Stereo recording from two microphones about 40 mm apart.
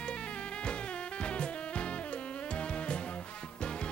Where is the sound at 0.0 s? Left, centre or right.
Left.